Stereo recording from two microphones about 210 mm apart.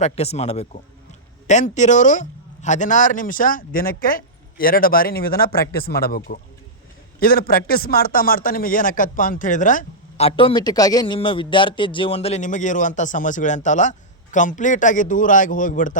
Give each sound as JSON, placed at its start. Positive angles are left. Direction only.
{"t": 0.0, "sound": "a man's voice", "side_deg": 30}